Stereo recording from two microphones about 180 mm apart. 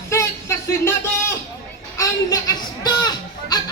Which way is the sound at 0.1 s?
15° left (ahead or behind).